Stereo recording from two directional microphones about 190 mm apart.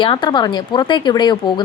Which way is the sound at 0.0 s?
25° left (ahead or behind).